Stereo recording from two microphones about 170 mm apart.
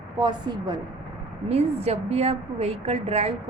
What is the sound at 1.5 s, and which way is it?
A woman's voice, 35° right (ahead or behind).